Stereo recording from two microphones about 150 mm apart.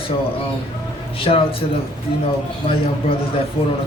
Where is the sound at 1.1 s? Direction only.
40° left (ahead or behind).